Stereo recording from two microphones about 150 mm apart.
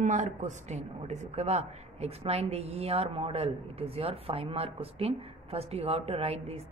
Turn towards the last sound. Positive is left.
turn(degrees=-40)  # may be behind; listen again after turning